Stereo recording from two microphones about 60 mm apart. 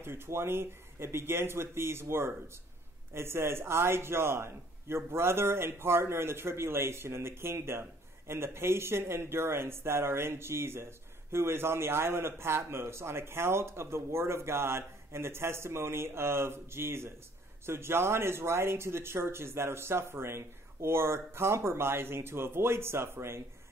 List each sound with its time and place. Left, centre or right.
0.0 s a man's voice: right